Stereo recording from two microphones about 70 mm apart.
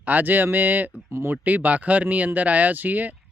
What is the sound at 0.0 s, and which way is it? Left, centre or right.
Speech, right.